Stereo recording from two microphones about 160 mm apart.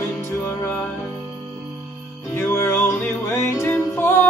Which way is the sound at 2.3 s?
15° left (ahead or behind).